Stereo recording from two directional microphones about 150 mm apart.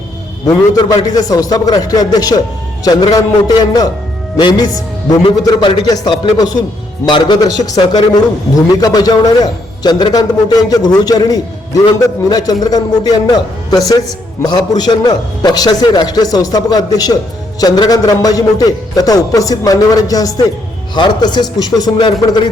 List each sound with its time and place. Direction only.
0.4 s a man's voice: 25° left (ahead or behind)
14.4 s a man's voice: 25° left (ahead or behind)